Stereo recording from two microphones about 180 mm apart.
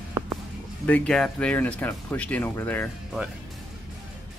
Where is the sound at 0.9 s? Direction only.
5° left (ahead or behind).